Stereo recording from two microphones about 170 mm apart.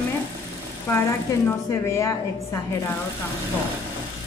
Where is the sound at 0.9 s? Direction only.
15° left (ahead or behind).